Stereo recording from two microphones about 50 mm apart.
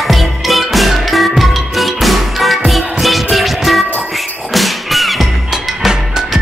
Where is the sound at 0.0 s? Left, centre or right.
Centre.